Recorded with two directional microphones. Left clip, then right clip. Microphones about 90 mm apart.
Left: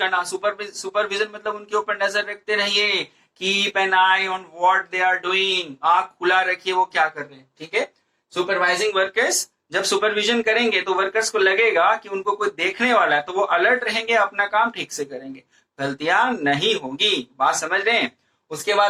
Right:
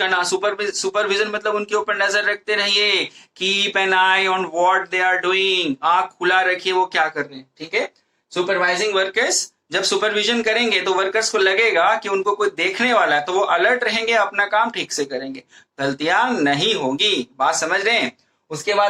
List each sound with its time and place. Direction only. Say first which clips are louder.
0.0 s speech: right 3 dB; 35° right (ahead or behind)